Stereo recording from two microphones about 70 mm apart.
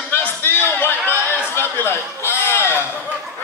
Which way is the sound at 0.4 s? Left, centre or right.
Left.